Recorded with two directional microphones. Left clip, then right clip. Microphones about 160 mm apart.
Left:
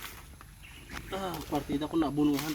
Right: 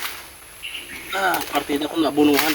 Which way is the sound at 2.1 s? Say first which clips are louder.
Right 12 dB; centre (ahead or behind).